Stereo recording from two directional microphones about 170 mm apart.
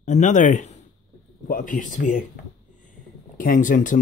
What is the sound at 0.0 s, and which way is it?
Speech, 45° left (ahead or behind).